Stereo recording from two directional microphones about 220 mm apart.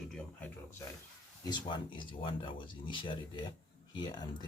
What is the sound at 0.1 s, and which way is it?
Speech, 5° left (ahead or behind).